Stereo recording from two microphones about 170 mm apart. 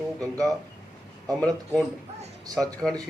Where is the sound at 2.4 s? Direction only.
20° right (ahead or behind).